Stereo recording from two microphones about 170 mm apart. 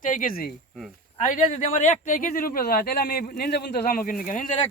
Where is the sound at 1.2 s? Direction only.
50° left (ahead or behind).